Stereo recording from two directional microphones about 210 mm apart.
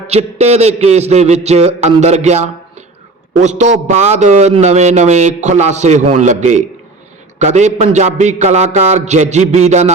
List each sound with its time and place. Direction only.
0.1 s a man's voice: 30° right (ahead or behind)